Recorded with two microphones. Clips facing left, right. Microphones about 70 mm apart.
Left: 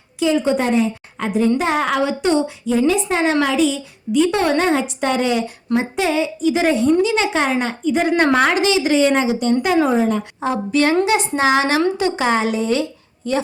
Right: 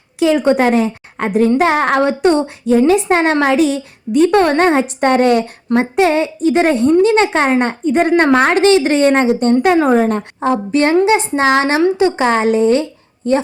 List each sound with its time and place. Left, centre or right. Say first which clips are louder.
0.2 s a woman's voice: right 5 dB; right